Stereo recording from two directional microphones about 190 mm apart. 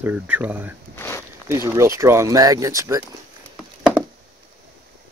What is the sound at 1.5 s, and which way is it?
Speech, 15° right (ahead or behind).